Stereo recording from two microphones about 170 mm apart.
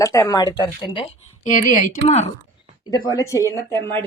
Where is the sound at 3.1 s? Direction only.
20° left (ahead or behind).